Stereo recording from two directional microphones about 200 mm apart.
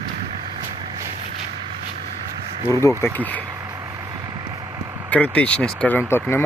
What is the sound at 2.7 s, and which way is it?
Speech, 15° left (ahead or behind).